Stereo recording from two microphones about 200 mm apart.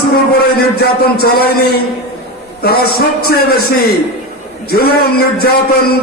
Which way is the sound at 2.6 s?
50° left (ahead or behind).